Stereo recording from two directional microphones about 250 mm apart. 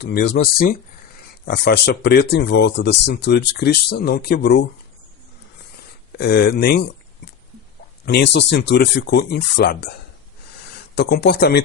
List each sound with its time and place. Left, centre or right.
0.0 s speech: left
6.1 s speech: left
8.0 s speech: left
10.9 s speech: left